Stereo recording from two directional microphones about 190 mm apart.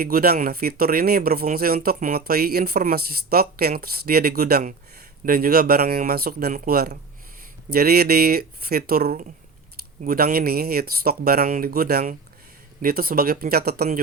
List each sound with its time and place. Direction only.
0.0 s speech: 50° right (ahead or behind)